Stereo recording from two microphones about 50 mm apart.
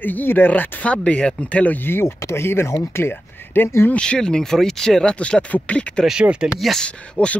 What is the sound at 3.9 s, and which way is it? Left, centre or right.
Speech, centre.